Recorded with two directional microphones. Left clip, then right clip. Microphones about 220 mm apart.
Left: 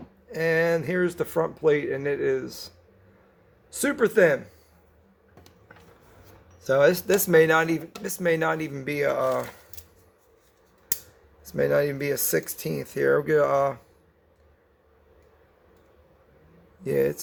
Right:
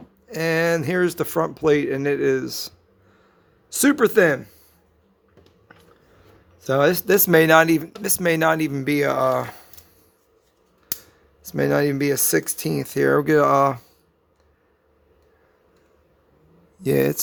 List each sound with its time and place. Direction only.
0.3 s speech: 55° right (ahead or behind)
6.6 s speech: 45° right (ahead or behind)
11.4 s speech: 50° right (ahead or behind)
16.8 s speech: 50° right (ahead or behind)